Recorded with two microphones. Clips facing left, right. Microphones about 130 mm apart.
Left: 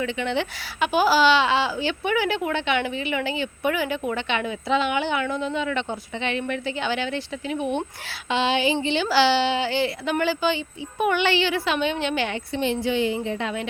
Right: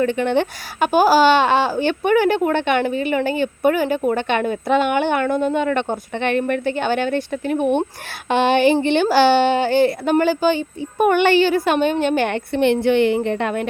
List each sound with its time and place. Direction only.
0.0 s speech: 50° right (ahead or behind)